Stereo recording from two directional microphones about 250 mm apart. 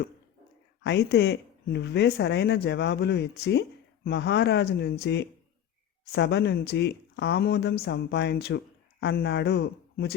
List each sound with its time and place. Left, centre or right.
0.8 s speech: left